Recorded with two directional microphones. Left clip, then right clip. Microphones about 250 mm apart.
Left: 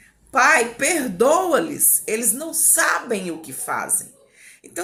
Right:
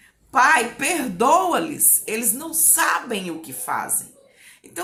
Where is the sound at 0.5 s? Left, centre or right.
Centre.